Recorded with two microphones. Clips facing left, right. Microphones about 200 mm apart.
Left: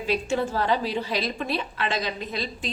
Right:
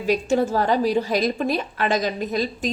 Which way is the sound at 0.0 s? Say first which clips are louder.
Right 5 dB; 45° right (ahead or behind).